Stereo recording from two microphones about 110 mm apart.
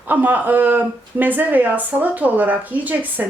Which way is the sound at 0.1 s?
15° right (ahead or behind).